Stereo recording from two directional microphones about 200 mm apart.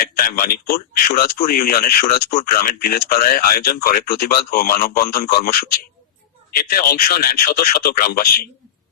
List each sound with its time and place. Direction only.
0.0 s speech: 50° left (ahead or behind)